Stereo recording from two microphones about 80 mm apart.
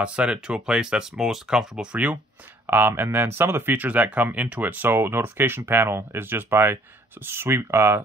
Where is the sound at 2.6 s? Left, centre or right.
Right.